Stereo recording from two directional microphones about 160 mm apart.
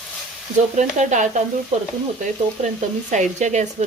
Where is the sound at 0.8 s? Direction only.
50° right (ahead or behind).